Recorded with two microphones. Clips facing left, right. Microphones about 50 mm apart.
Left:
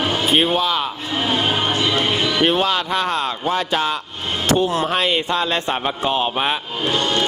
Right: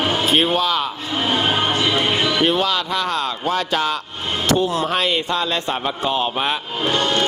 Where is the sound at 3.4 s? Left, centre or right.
Centre.